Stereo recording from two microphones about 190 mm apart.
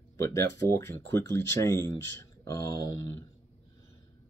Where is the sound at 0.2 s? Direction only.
15° left (ahead or behind).